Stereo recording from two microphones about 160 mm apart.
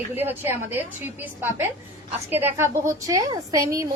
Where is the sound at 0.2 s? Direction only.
10° right (ahead or behind).